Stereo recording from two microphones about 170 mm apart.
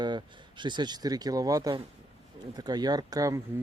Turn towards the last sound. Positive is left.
turn(degrees=-20)  # may be behind; listen again after turning